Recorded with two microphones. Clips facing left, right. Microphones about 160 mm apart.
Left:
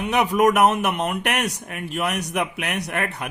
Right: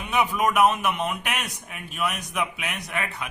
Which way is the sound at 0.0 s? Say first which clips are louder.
Left 5 dB; 70° left (ahead or behind).